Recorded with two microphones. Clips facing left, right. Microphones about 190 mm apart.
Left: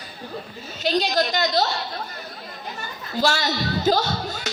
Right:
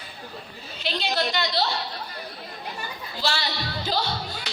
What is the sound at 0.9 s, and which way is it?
Speech, 40° left (ahead or behind).